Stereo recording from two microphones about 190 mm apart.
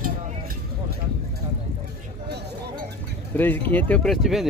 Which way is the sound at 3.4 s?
10° left (ahead or behind).